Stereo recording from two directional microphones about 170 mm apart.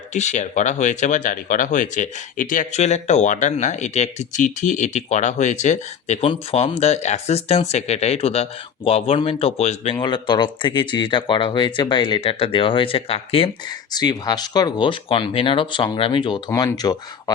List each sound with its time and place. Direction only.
0.1 s speech: 45° left (ahead or behind)
6.2 s speech: 35° left (ahead or behind)